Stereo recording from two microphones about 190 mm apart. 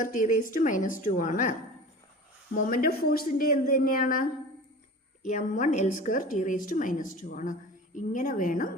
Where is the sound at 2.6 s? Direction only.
50° left (ahead or behind).